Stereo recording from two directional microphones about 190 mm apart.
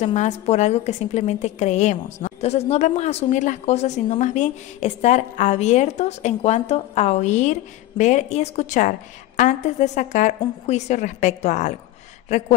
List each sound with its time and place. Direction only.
0.0 s a woman's voice: 35° left (ahead or behind)